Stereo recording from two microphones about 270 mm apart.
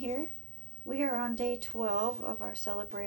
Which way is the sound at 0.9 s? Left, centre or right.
Right.